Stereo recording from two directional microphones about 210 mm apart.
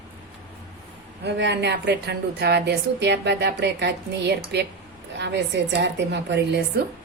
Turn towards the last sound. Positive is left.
turn(degrees=-55)  # may be behind; listen again after turning